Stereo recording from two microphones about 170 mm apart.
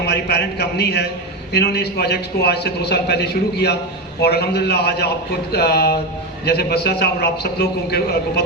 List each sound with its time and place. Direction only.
0.0 s a man's voice: 70° left (ahead or behind)